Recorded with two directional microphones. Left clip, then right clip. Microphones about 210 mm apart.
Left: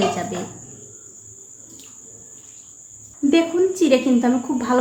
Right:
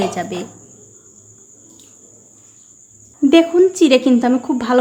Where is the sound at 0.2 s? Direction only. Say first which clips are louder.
Right 3 dB; 35° right (ahead or behind).